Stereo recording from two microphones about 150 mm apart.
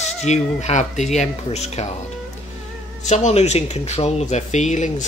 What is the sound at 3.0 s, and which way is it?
Speech, 50° left (ahead or behind).